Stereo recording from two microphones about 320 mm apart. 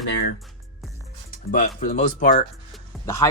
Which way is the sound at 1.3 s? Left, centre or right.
Left.